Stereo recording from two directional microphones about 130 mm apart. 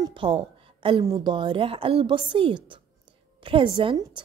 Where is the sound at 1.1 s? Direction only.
35° right (ahead or behind).